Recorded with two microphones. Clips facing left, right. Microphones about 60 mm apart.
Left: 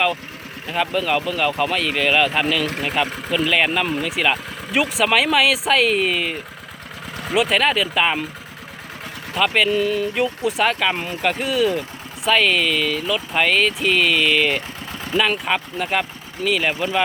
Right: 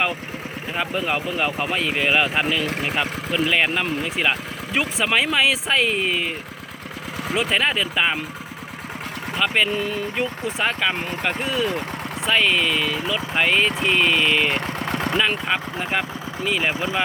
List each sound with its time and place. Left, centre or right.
0.7 s speech: right
4.7 s speech: centre
5.1 s speech: centre
9.4 s speech: centre
14.8 s vehicle: right
15.2 s speech: centre